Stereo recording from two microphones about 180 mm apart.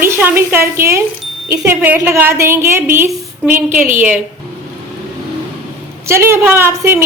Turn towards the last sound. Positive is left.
turn(degrees=-10)  # may be behind; listen again after turning